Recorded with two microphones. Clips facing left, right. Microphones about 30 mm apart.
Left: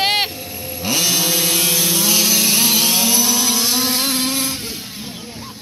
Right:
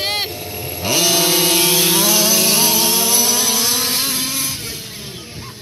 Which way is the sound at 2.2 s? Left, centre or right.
Right.